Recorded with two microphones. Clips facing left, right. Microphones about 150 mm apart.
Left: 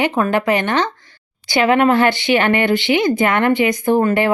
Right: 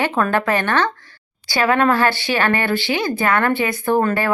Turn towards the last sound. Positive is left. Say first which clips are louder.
# left 3 dB
turn(degrees=20)  # may be behind; listen again after turning